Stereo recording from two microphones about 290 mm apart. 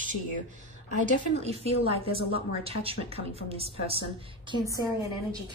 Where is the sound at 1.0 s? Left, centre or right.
Right.